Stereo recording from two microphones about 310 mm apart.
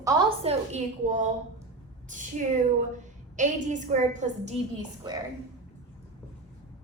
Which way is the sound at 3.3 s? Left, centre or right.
Right.